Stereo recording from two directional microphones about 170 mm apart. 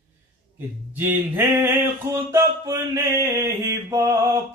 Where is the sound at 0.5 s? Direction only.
10° right (ahead or behind).